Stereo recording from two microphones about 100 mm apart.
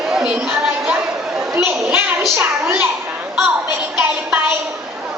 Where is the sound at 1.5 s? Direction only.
20° right (ahead or behind).